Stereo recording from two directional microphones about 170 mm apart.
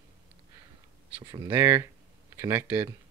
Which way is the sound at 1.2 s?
25° right (ahead or behind).